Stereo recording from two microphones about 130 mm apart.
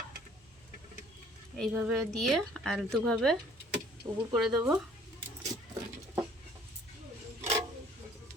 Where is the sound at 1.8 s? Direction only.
Centre (ahead or behind).